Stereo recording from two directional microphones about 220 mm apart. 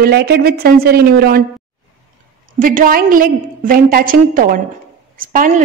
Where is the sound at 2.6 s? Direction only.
40° right (ahead or behind).